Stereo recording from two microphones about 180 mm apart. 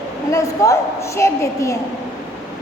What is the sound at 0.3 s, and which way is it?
A woman's voice, 15° left (ahead or behind).